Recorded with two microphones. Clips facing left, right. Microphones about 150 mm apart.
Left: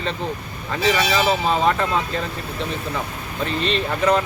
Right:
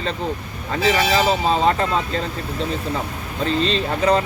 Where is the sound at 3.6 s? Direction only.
30° right (ahead or behind).